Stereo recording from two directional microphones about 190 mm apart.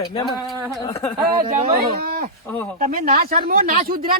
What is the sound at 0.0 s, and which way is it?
Speech, 20° left (ahead or behind).